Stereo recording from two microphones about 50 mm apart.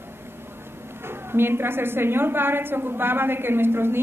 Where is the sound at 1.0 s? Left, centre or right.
Right.